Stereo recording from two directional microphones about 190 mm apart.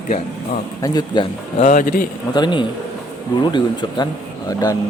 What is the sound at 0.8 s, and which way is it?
Speech, 20° left (ahead or behind).